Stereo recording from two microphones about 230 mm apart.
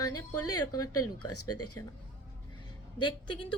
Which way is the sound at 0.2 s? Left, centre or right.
Centre.